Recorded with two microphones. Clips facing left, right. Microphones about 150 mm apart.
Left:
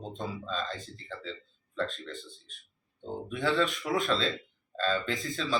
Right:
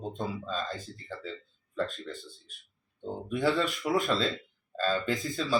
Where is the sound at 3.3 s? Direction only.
10° right (ahead or behind).